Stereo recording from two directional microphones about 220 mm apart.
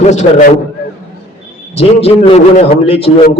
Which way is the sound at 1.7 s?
25° left (ahead or behind).